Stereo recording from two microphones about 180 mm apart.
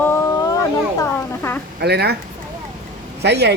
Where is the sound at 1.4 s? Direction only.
15° left (ahead or behind).